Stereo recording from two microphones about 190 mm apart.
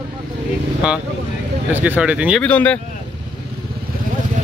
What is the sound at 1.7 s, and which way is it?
Speech, 10° right (ahead or behind).